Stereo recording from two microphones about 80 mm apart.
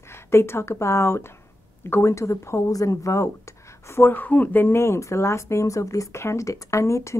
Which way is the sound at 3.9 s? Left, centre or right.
Left.